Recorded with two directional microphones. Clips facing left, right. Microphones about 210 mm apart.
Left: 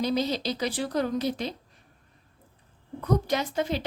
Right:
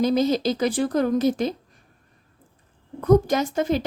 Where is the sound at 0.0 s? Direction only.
45° right (ahead or behind).